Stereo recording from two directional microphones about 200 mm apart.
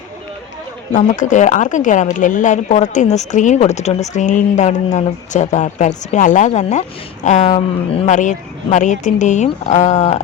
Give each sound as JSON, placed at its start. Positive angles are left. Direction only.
{"t": 0.9, "sound": "speech", "side_deg": 40}